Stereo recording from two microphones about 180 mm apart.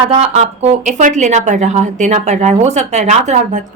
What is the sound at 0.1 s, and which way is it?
Speech, 35° right (ahead or behind).